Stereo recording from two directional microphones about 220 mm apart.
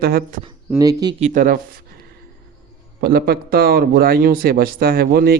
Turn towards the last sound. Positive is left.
turn(degrees=-45)  # may be behind; listen again after turning